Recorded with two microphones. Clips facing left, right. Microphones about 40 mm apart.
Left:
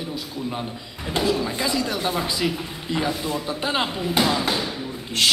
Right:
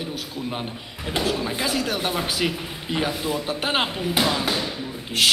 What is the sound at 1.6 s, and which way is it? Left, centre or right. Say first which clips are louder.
Speech: right 1 dB; right.